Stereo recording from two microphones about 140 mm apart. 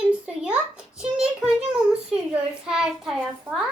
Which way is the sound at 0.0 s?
10° right (ahead or behind).